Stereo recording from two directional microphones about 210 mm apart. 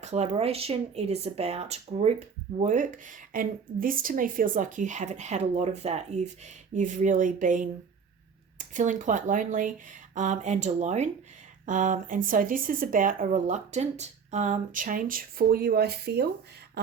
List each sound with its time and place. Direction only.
0.0 s speech: 30° right (ahead or behind); by 16.2 s 50° right (ahead or behind)